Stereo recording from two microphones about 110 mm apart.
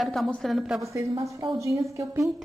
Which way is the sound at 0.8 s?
30° right (ahead or behind).